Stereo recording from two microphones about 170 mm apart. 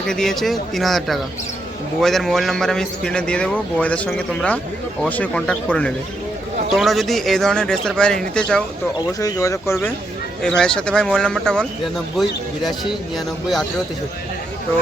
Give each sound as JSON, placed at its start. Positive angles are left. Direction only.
{"t": 0.1, "sound": "a man's voice", "side_deg": 0}
{"t": 9.2, "sound": "speech", "side_deg": 20}
{"t": 10.4, "sound": "a man's voice", "side_deg": 5}